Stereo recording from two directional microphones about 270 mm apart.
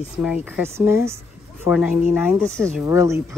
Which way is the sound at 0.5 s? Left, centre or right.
Centre.